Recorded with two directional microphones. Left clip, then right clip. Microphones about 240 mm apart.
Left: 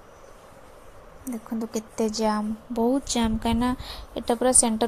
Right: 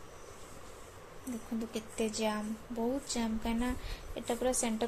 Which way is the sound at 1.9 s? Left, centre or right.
Left.